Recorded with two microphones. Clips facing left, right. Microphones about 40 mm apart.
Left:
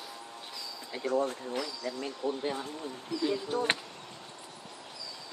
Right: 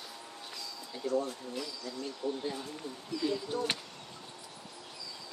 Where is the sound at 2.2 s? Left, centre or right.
Left.